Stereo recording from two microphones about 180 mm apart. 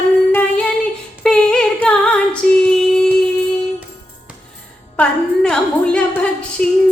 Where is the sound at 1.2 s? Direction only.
5° left (ahead or behind).